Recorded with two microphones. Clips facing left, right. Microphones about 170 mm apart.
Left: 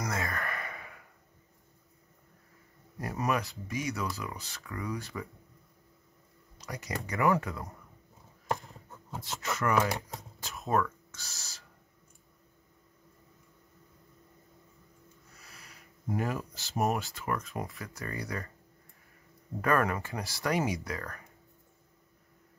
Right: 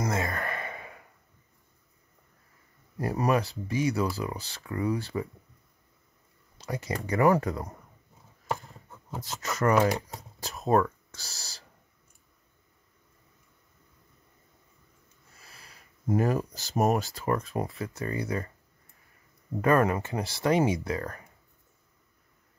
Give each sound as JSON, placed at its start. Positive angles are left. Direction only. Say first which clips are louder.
{"t": 0.0, "sound": "sigh", "louder": "right 5 dB", "side_deg": -25}
{"t": 3.0, "sound": "speech", "louder": "right 5 dB", "side_deg": -35}
{"t": 6.6, "sound": "speech", "louder": "right 5 dB", "side_deg": -30}
{"t": 9.4, "sound": "speech", "louder": "right 5 dB", "side_deg": -40}
{"t": 15.4, "sound": "a sound", "louder": "right 1 dB", "side_deg": -30}
{"t": 16.1, "sound": "speech", "louder": "right 7 dB", "side_deg": -40}
{"t": 17.7, "sound": "speech", "louder": "right 7 dB", "side_deg": -20}
{"t": 19.6, "sound": "speech", "louder": "right 5 dB", "side_deg": -25}